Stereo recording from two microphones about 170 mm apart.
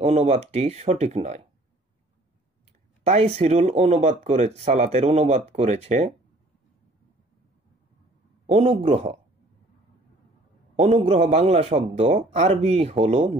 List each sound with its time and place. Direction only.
0.0 s speech: 40° right (ahead or behind)
3.0 s speech: 40° right (ahead or behind)
8.5 s speech: 40° right (ahead or behind)
10.8 s speech: 35° right (ahead or behind)